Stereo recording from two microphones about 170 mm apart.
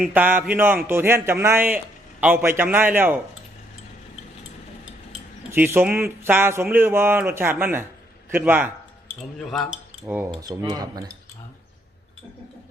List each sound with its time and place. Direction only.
0.0 s speech: 10° right (ahead or behind)
5.5 s speech: 15° right (ahead or behind)
9.4 s speech: centre (ahead or behind)
10.1 s cutlery: 15° right (ahead or behind)